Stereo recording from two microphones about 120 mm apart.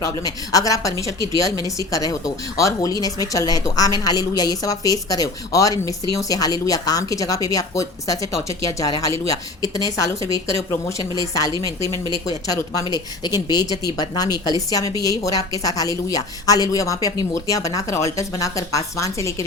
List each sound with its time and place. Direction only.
0.0 s speech: 30° left (ahead or behind)
12.9 s a woman's voice: 35° left (ahead or behind)